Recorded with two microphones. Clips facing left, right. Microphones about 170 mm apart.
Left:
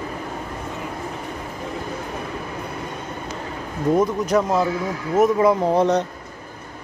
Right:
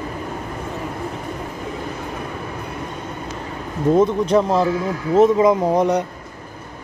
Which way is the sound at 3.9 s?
25° right (ahead or behind).